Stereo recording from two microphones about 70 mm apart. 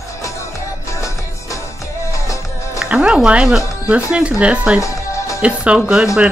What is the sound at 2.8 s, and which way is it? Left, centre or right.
Speech, centre.